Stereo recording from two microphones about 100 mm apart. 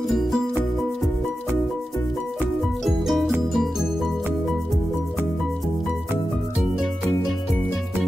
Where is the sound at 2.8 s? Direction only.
Centre (ahead or behind).